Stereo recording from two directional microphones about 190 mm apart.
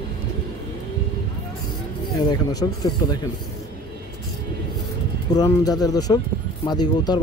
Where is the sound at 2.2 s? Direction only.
20° left (ahead or behind).